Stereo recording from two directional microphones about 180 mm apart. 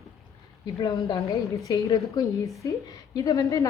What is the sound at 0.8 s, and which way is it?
A woman's voice, 20° left (ahead or behind).